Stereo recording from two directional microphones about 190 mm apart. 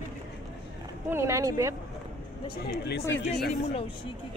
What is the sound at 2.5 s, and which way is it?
Speech, 60° left (ahead or behind).